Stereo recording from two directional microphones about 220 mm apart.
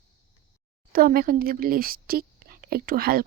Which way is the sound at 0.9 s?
40° right (ahead or behind).